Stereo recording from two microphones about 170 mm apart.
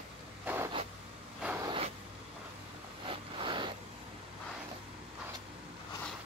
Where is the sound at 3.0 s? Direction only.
30° right (ahead or behind).